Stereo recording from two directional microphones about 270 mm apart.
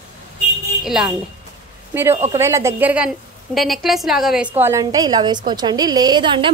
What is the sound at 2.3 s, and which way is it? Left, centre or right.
A woman's voice, centre.